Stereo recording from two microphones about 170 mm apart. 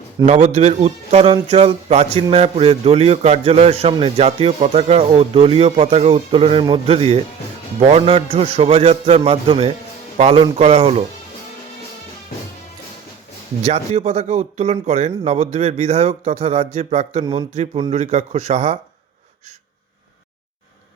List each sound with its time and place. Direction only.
0.3 s a man's voice: 40° right (ahead or behind)
13.6 s a man's voice: 40° right (ahead or behind)